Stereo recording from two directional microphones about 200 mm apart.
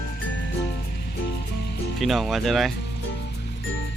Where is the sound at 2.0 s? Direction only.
Centre (ahead or behind).